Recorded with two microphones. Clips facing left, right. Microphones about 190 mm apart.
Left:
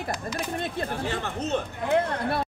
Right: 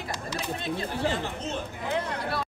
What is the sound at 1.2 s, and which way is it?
Speech, 60° left (ahead or behind).